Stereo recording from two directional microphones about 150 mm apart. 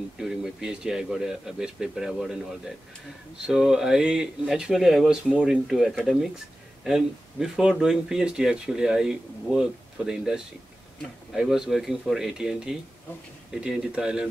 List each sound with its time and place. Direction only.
0.2 s speech: 5° right (ahead or behind)